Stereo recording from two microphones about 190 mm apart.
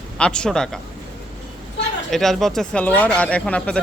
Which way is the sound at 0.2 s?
5° left (ahead or behind).